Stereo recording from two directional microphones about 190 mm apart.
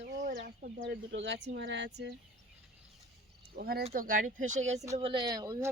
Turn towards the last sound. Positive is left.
turn(degrees=-15)  # may be behind; listen again after turning